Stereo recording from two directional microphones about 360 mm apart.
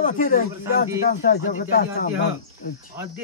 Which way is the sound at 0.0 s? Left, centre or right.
Left.